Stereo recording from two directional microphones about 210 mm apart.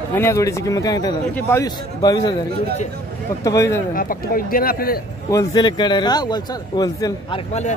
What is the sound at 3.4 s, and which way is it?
Speech, 15° left (ahead or behind).